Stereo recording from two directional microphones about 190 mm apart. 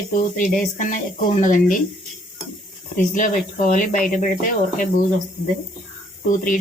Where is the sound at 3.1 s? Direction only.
45° left (ahead or behind).